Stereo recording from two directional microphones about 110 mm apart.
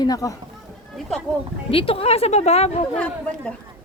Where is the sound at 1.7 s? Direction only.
60° left (ahead or behind); by 2.7 s 80° left.